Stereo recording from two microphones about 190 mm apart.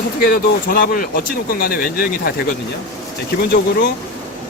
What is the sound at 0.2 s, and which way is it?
Speech, 50° left (ahead or behind).